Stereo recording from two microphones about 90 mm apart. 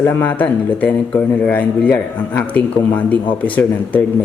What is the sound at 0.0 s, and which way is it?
A man's voice, 20° left (ahead or behind).